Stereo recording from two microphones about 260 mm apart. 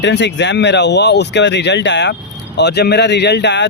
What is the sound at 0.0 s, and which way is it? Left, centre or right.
Speech, left.